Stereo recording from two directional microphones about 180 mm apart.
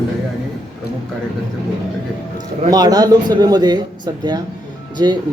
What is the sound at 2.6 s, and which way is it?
Speech, 20° right (ahead or behind).